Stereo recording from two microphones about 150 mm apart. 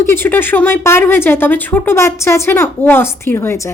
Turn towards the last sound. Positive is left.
turn(degrees=15)  # may be behind; listen again after turning